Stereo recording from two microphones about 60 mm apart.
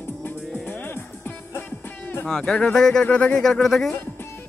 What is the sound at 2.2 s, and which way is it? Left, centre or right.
Speech, centre.